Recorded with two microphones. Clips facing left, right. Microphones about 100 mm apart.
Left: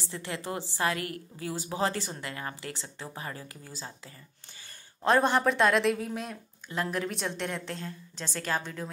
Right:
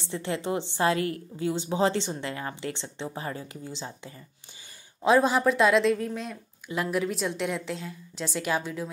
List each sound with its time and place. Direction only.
0.0 s a woman's voice: 30° right (ahead or behind)
5.0 s a woman's voice: 5° right (ahead or behind)
6.7 s a woman's voice: 10° right (ahead or behind)